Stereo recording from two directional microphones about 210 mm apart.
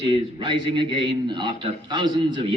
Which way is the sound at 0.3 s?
20° right (ahead or behind).